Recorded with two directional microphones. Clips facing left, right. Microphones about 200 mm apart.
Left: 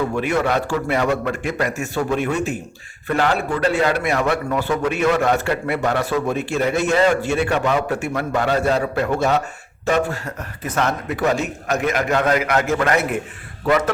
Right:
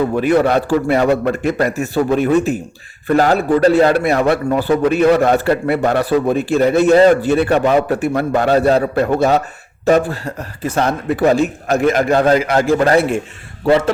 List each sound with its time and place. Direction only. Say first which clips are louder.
0.1 s a man's voice: right 6 dB; 35° right (ahead or behind)